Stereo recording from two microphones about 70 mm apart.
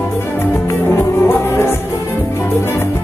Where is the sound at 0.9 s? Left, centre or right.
Left.